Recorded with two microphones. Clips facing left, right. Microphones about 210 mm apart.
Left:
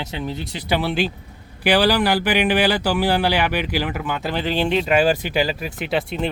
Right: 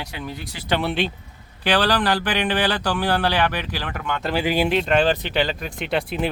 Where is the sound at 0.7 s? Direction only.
Centre (ahead or behind).